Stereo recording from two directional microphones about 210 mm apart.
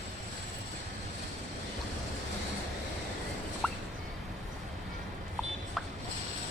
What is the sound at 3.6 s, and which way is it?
Rodents, 5° left (ahead or behind).